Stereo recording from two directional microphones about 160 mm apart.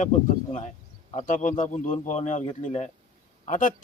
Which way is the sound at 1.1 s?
55° left (ahead or behind).